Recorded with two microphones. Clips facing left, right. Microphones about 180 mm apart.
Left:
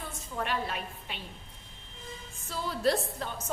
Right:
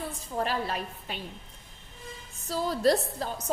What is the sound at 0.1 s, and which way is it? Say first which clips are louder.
A woman's voice: right 1 dB; 35° right (ahead or behind).